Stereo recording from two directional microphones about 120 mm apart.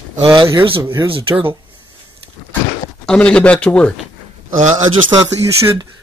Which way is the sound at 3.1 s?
10° left (ahead or behind).